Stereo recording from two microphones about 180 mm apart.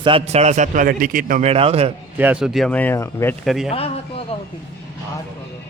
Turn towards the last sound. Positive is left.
turn(degrees=35)  # may be behind; listen again after turning